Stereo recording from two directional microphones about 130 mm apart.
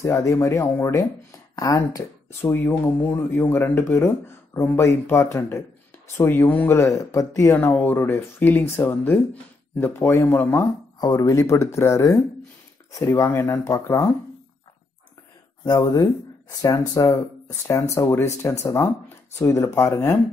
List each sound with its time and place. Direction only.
0.0 s speech: 25° left (ahead or behind)
11.0 s speech: 30° left (ahead or behind)
15.6 s speech: 30° left (ahead or behind)